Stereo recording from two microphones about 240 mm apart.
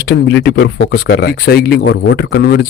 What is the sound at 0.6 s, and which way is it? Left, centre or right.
Speech, left.